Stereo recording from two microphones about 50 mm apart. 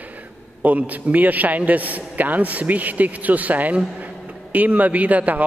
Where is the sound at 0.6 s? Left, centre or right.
Right.